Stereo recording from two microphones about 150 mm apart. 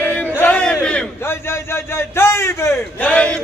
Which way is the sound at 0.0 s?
10° left (ahead or behind).